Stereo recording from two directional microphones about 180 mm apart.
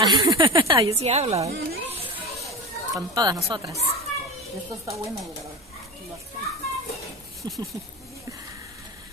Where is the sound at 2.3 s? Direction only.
Centre (ahead or behind).